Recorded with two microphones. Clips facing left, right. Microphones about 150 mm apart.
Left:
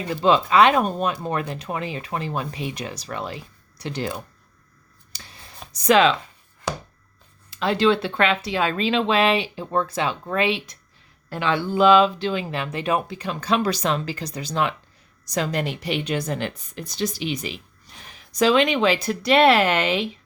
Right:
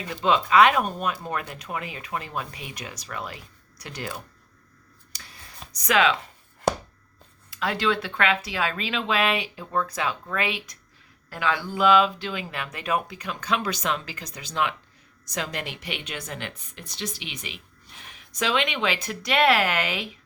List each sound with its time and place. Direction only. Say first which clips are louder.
0.1 s a woman's voice: left 3 dB; 35° left (ahead or behind)
5.1 s a sound: left 2 dB; 25° left (ahead or behind)
7.5 s a woman's voice: left 6 dB; 25° left (ahead or behind)